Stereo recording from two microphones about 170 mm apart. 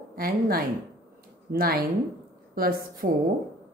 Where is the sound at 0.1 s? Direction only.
60° right (ahead or behind).